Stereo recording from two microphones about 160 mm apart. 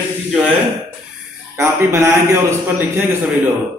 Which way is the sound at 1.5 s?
15° right (ahead or behind).